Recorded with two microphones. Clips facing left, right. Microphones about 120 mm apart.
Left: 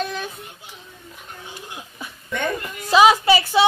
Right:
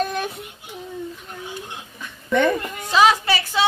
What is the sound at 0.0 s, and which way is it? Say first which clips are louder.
Child singing: right 3 dB; 50° right (ahead or behind).